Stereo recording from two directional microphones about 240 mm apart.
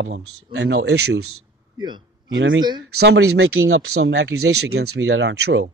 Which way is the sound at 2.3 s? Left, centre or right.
Right.